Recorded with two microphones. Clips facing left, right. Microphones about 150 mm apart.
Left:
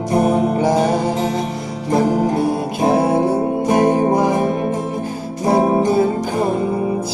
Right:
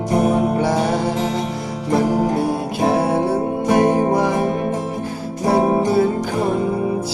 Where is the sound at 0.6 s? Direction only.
15° left (ahead or behind).